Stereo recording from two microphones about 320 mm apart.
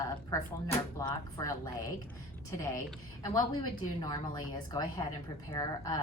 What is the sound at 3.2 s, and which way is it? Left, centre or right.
A woman's voice, centre.